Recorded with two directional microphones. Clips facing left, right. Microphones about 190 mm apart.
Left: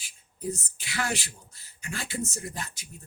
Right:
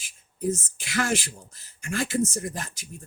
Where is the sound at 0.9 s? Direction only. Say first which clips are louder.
Right 5 dB; 45° right (ahead or behind).